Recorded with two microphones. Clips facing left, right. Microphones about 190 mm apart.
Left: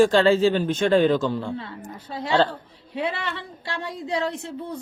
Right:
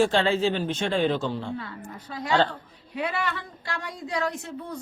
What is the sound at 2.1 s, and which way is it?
A woman's voice, 30° left (ahead or behind).